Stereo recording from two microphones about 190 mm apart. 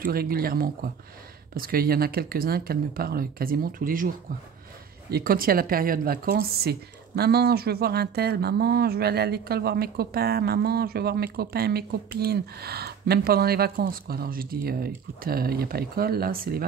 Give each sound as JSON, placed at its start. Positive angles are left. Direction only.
{"t": 0.0, "sound": "speech", "side_deg": -50}
{"t": 5.1, "sound": "speech", "side_deg": -50}